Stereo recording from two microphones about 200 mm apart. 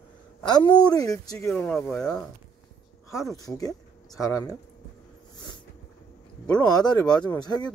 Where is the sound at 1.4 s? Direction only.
5° left (ahead or behind).